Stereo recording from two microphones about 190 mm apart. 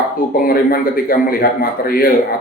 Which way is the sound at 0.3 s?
50° left (ahead or behind).